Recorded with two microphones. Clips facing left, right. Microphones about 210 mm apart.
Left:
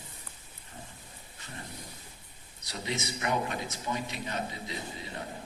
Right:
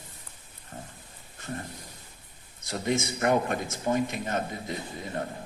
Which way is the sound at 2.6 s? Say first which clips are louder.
Right 7 dB; 50° right (ahead or behind).